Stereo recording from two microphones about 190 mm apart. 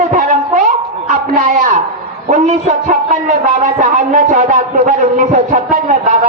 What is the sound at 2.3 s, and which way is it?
A man's voice, 40° right (ahead or behind).